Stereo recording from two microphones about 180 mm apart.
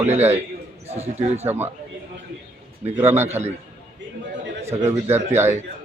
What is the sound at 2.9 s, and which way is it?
Speech, 10° right (ahead or behind).